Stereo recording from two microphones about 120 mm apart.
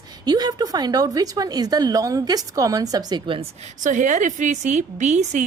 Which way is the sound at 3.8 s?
90° right.